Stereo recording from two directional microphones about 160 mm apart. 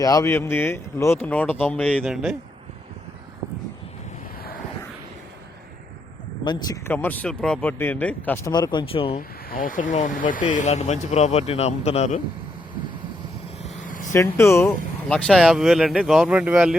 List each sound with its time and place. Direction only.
0.0 s speech: 20° left (ahead or behind)
6.4 s speech: 30° left (ahead or behind)
6.8 s speech: 10° left (ahead or behind)
8.5 s speech: 25° left (ahead or behind)
9.1 s speech: 60° left (ahead or behind); by 12.2 s 45° left (ahead or behind)
13.8 s vehicle: 55° left (ahead or behind)
14.1 s speech: 15° left (ahead or behind)
15.1 s speech: centre (ahead or behind)